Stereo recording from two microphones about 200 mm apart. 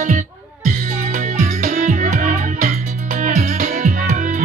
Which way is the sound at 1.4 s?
40° right (ahead or behind).